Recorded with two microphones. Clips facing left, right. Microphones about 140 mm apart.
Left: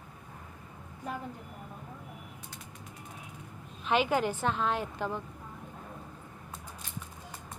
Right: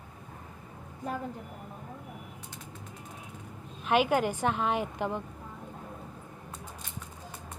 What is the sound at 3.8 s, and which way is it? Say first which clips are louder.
A woman's voice: right 2 dB; 10° right (ahead or behind).